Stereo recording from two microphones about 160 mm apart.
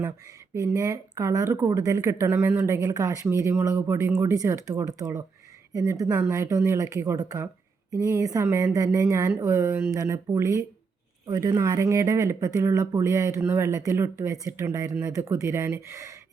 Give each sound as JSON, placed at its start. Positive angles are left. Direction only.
{"t": 0.5, "sound": "speech", "side_deg": -20}